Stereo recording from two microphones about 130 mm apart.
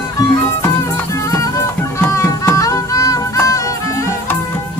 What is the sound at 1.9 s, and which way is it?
Music, 20° left (ahead or behind).